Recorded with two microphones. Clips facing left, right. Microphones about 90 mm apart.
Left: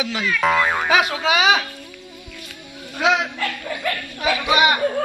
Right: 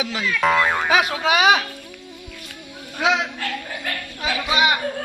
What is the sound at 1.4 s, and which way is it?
Speech, 5° right (ahead or behind).